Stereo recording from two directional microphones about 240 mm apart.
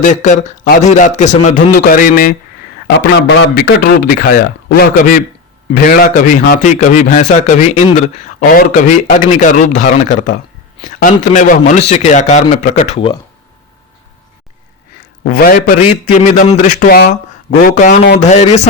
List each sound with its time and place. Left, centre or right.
0.0 s a man's voice: left
15.2 s a man's voice: left